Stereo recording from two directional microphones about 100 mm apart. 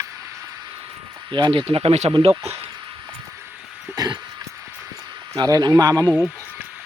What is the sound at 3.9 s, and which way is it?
Speech, 40° right (ahead or behind).